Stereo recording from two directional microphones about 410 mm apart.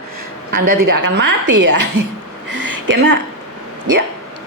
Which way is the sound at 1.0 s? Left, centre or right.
Right.